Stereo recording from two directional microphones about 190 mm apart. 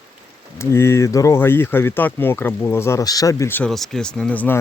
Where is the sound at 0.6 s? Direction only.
15° left (ahead or behind).